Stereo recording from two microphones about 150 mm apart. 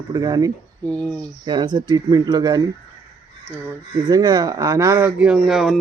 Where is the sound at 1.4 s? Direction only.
30° right (ahead or behind).